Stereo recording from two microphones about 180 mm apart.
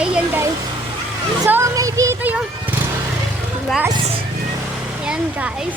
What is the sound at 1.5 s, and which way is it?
Speech, 15° right (ahead or behind).